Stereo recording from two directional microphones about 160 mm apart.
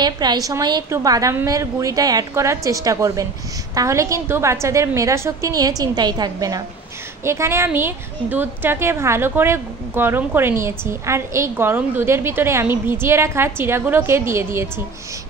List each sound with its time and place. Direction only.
0.0 s a woman's voice: 25° right (ahead or behind)